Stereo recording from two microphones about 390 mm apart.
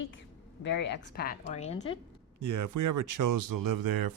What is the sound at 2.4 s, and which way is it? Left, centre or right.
Speech, right.